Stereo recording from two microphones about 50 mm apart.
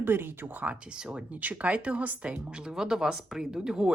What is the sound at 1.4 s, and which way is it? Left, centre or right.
Speech, right.